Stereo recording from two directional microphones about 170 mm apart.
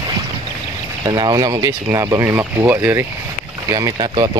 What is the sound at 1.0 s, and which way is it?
Speech, 25° right (ahead or behind).